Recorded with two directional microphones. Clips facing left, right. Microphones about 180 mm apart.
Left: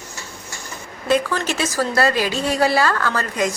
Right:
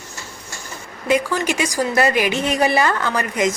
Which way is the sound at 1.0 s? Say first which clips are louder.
Right 1 dB; 10° right (ahead or behind).